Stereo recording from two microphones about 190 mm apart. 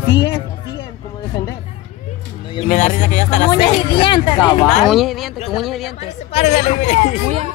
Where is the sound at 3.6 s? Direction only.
25° left (ahead or behind).